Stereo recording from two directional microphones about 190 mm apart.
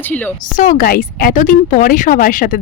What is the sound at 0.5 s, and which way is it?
A woman's voice, 45° left (ahead or behind).